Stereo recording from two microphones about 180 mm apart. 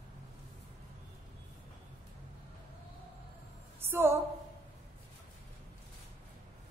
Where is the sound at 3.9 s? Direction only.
15° right (ahead or behind).